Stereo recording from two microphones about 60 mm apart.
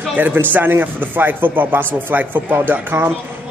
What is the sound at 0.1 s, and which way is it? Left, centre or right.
Speech, right.